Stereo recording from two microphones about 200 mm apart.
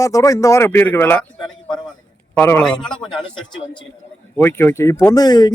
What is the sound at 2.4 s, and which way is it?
Speech, 10° left (ahead or behind).